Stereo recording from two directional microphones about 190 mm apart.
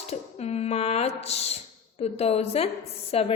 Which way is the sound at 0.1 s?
35° left (ahead or behind).